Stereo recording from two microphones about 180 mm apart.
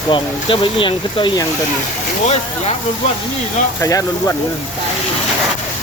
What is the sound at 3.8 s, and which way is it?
Speech, 15° left (ahead or behind).